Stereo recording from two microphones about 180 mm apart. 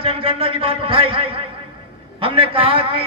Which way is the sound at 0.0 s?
30° right (ahead or behind).